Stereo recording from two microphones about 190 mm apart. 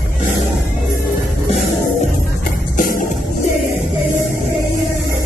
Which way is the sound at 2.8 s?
45° left (ahead or behind).